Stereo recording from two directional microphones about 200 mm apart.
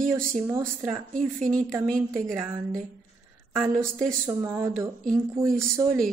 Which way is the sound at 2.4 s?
15° right (ahead or behind).